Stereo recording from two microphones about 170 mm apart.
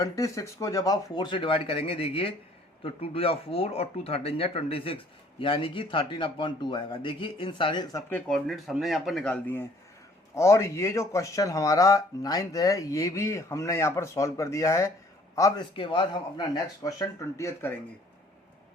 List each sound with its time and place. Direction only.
0.0 s speech: 20° left (ahead or behind)
8.1 s a man's voice: centre (ahead or behind); by 15.6 s 20° left (ahead or behind)
15.7 s speech: 30° left (ahead or behind)
16.6 s speech: 20° left (ahead or behind)